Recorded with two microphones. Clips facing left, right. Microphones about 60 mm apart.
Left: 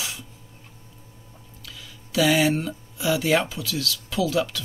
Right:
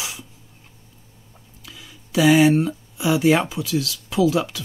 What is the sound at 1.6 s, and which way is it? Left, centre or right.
Speech, centre.